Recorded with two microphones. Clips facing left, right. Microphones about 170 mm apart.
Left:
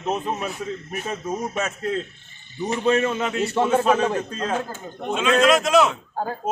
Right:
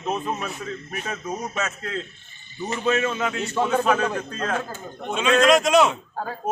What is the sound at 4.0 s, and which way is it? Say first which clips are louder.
Speech: left 3 dB; 25° left (ahead or behind).